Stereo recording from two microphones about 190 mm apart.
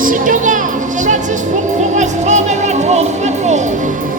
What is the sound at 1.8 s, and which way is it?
Speech, 40° right (ahead or behind).